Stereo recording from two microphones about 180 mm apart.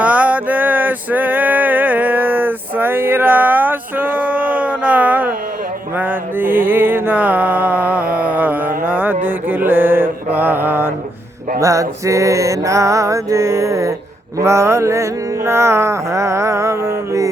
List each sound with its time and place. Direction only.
0.0 s male singing: 10° right (ahead or behind)
6.0 s music: 10° right (ahead or behind)
11.6 s mantra: 15° right (ahead or behind)